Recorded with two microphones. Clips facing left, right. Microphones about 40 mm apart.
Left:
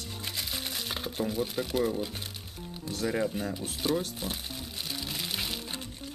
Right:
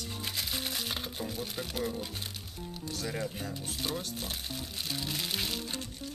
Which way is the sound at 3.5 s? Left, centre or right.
Centre.